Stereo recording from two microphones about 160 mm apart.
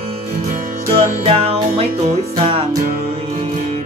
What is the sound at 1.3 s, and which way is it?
Music, 35° right (ahead or behind).